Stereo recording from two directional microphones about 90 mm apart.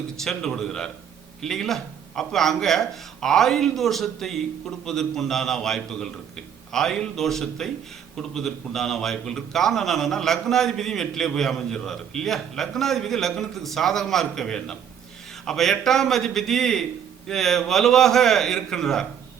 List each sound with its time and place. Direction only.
0.2 s a man's voice: 5° left (ahead or behind)